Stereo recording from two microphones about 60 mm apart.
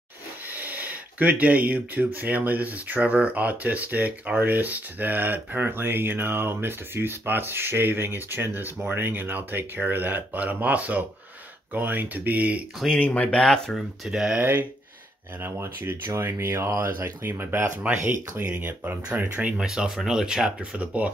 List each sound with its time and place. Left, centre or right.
0.5 s a sound: right
2.0 s speech: right
13.0 s speech: left
13.4 s speech: centre
14.0 s speech: centre
14.4 s speech: right
19.5 s speech: centre